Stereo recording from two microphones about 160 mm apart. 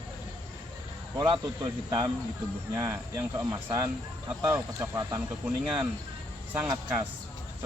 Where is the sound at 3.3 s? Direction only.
20° right (ahead or behind).